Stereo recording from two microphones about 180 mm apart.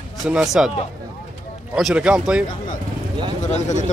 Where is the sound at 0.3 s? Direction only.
5° right (ahead or behind).